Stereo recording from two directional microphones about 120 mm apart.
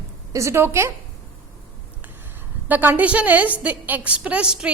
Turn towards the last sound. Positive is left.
turn(degrees=-5)  # may be behind; listen again after turning